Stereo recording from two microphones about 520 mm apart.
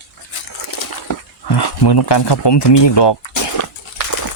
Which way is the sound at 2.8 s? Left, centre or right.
Left.